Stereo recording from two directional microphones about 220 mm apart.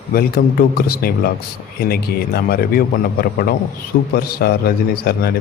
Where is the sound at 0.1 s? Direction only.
45° left (ahead or behind).